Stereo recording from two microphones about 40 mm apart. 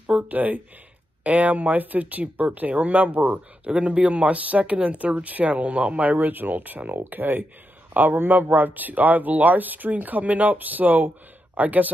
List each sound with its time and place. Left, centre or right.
0.0 s speech: right
3.7 s speech: right
6.0 s speech: right